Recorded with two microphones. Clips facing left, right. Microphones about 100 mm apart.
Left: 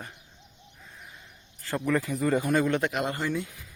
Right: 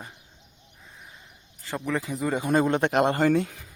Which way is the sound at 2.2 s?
15° right (ahead or behind).